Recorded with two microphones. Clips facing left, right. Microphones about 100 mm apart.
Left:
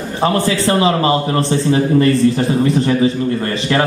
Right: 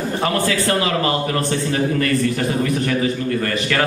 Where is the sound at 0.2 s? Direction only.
25° left (ahead or behind).